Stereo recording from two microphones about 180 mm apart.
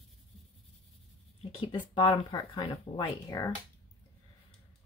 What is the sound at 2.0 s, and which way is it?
Speech, 25° left (ahead or behind).